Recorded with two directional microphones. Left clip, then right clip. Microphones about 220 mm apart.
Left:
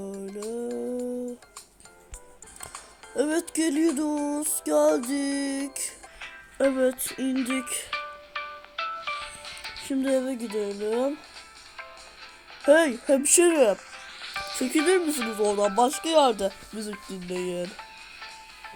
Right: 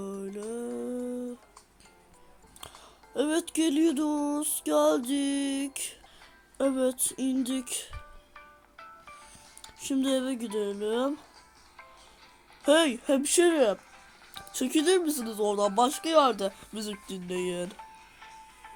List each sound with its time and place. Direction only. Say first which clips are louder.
0.0 s music: left 2 dB; centre (ahead or behind)
3.2 s music: left 2 dB; centre (ahead or behind)
3.5 s speech: left 1 dB; centre (ahead or behind)
7.9 s music: left 16 dB; 45° left (ahead or behind)
9.8 s speech: left 3 dB; 5° right (ahead or behind)
12.6 s speech: left 4 dB; 5° right (ahead or behind)
13.7 s music: left 10 dB; 40° left (ahead or behind)
14.6 s speech: left 2 dB; centre (ahead or behind)